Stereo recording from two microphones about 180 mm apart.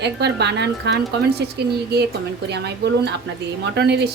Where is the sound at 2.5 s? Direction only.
70° right (ahead or behind).